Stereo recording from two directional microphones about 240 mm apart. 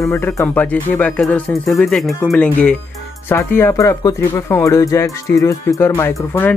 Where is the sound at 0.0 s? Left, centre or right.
Centre.